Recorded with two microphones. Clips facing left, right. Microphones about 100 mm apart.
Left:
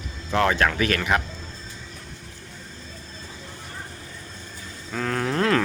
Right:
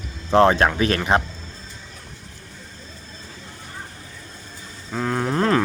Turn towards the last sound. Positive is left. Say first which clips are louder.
# right 2 dB
turn(degrees=-15)  # may be behind; listen again after turning